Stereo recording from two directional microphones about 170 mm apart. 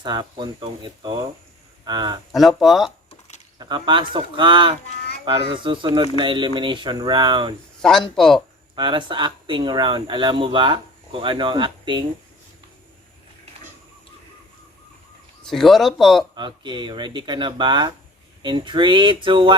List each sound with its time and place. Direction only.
0.0 s speech: 25° right (ahead or behind)
2.3 s speech: centre (ahead or behind)
3.1 s a sound: 40° left (ahead or behind)
3.6 s speech: 30° right (ahead or behind)
7.8 s speech: centre (ahead or behind)
8.7 s speech: 30° right (ahead or behind)
15.4 s speech: centre (ahead or behind)
16.3 s speech: 30° right (ahead or behind)